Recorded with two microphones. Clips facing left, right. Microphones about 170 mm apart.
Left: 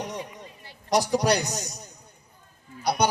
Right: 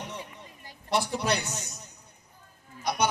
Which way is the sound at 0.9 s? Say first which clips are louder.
Left 5 dB; 40° left (ahead or behind).